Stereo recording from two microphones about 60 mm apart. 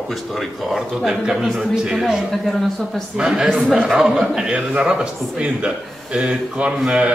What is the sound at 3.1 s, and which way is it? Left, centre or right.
A man's voice, centre.